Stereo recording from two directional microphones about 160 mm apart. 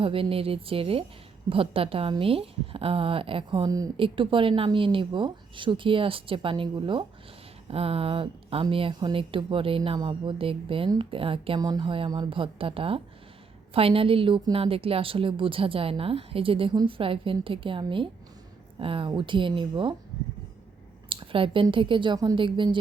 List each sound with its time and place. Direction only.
0.0 s a woman's voice: 35° right (ahead or behind)
21.1 s a woman's voice: 35° right (ahead or behind)